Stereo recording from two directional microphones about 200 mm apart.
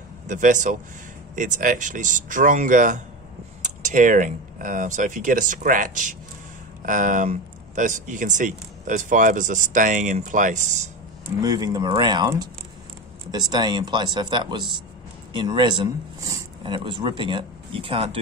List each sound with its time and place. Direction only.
0.3 s speech: 40° right (ahead or behind)
11.4 s speech: 20° right (ahead or behind)